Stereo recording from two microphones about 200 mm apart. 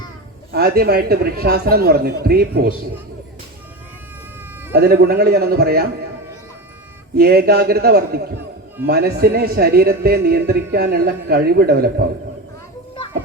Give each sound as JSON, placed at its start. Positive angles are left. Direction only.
{"t": 0.5, "sound": "speech", "side_deg": -50}
{"t": 4.7, "sound": "speech", "side_deg": -55}
{"t": 7.2, "sound": "speech", "side_deg": -50}